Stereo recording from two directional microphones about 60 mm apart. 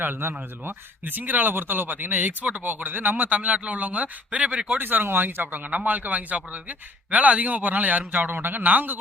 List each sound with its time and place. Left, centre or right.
0.0 s speech: right
4.8 s speech: right